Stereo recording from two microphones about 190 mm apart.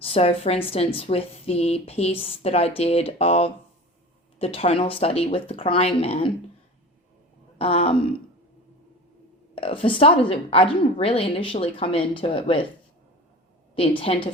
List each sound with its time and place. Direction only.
0.0 s a woman's voice: 30° left (ahead or behind)
7.6 s a woman's voice: 30° left (ahead or behind)
9.6 s a woman's voice: 30° left (ahead or behind)
13.7 s a woman's voice: 30° left (ahead or behind)